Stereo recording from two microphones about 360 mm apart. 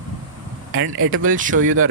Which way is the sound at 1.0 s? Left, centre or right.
Right.